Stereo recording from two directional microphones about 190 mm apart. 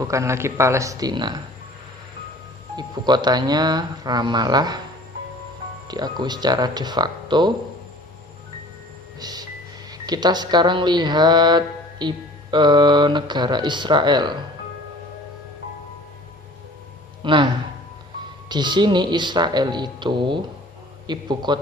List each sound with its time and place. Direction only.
0.0 s speech: 15° right (ahead or behind)
2.7 s speech: 20° right (ahead or behind)
5.9 s speech: 20° right (ahead or behind)
9.1 s vehicle: 20° right (ahead or behind)
9.9 s speech: 20° right (ahead or behind)
17.2 s speech: 25° right (ahead or behind)